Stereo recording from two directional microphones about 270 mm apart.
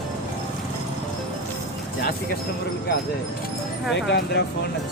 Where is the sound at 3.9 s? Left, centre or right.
Left.